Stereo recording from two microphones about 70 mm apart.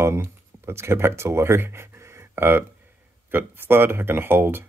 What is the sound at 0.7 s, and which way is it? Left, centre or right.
Speech, right.